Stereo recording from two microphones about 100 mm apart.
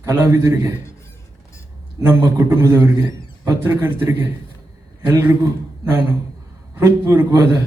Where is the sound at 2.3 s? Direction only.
25° right (ahead or behind).